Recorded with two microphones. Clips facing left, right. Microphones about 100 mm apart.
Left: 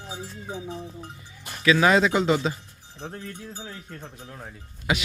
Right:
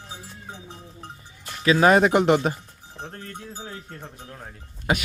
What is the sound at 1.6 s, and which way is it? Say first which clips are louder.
Speech: right 2 dB; 35° right (ahead or behind).